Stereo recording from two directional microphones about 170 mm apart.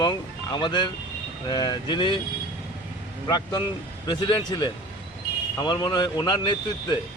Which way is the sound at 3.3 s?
25° left (ahead or behind).